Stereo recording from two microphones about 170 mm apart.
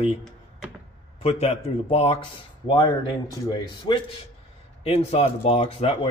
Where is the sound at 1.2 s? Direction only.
40° left (ahead or behind).